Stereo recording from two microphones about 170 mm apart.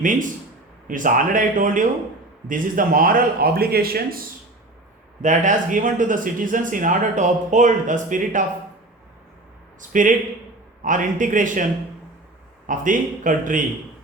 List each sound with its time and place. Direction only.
0.0 s speech: 50° right (ahead or behind)
5.2 s speech: 45° right (ahead or behind)
9.9 s speech: 50° right (ahead or behind)
12.6 s speech: 50° right (ahead or behind)